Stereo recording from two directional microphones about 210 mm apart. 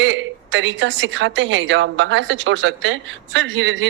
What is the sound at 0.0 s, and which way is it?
A woman's voice, 65° right (ahead or behind).